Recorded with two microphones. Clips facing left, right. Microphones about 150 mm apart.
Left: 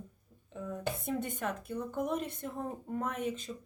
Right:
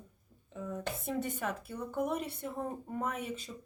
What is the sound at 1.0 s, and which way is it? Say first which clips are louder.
Speech: right 2 dB; centre (ahead or behind).